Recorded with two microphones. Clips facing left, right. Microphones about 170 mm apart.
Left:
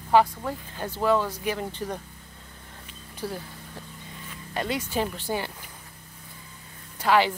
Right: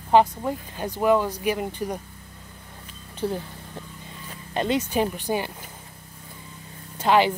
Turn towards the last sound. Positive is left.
turn(degrees=-20)  # may be behind; listen again after turning